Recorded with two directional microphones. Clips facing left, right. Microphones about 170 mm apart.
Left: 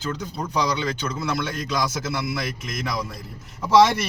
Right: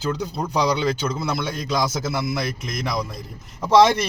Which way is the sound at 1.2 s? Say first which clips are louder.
Right 1 dB; 10° right (ahead or behind).